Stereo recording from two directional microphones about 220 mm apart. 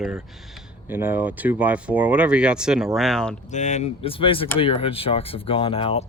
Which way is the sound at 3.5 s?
30° left (ahead or behind).